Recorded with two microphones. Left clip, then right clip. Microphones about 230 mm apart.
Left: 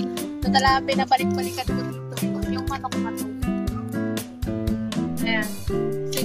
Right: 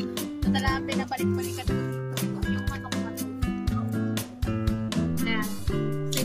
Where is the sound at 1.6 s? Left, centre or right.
Centre.